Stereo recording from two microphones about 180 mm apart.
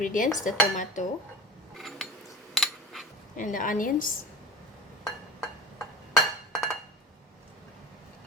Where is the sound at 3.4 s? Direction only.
50° left (ahead or behind).